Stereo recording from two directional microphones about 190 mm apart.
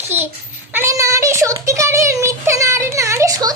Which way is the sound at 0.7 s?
15° right (ahead or behind).